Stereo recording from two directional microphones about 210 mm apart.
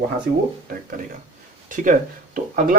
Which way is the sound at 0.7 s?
40° right (ahead or behind).